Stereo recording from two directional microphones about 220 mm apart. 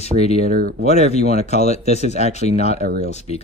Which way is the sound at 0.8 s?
30° left (ahead or behind).